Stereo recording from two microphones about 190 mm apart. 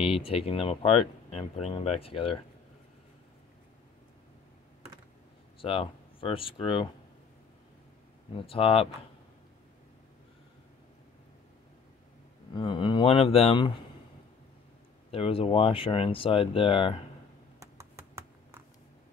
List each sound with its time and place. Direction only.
0.0 s speech: 30° left (ahead or behind)
5.6 s speech: 30° left (ahead or behind)
8.5 s speech: 30° left (ahead or behind)
12.5 s speech: 25° left (ahead or behind)
15.0 s speech: 30° left (ahead or behind)
17.6 s typing: 15° right (ahead or behind)